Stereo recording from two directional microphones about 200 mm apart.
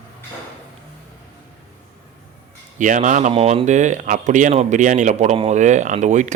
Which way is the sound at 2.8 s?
40° right (ahead or behind).